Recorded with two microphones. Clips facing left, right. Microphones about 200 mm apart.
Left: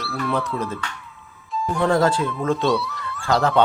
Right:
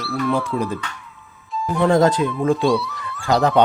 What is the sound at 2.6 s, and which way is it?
Music, centre (ahead or behind).